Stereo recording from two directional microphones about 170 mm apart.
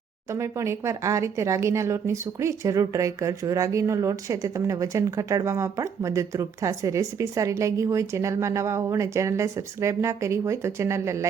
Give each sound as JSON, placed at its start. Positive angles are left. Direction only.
{"t": 0.3, "sound": "speech", "side_deg": -15}